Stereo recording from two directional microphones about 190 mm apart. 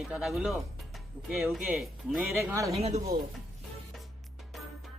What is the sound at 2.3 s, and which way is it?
Speech, 15° right (ahead or behind).